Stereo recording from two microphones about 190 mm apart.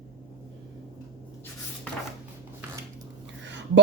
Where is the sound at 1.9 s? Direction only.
5° left (ahead or behind).